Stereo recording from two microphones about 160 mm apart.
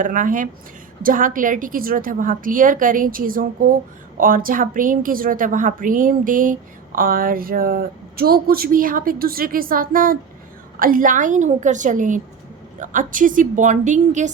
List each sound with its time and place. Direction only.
0.0 s a woman's voice: 55° right (ahead or behind)